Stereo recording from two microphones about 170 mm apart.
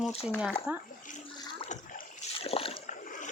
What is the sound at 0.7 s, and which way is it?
Speech, 10° right (ahead or behind).